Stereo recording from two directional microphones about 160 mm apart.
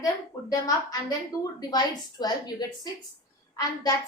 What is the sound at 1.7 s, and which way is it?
A woman's voice, 25° left (ahead or behind).